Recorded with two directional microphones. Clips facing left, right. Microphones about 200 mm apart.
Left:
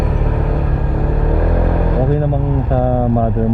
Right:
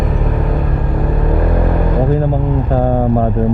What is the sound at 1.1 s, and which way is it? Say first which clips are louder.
Vehicle: right 1 dB; 25° right (ahead or behind).